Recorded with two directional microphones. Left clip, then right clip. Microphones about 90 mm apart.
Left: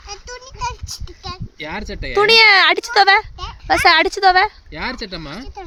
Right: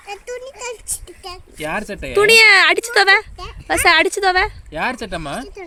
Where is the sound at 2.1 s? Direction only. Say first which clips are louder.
Right 1 dB; 35° left (ahead or behind).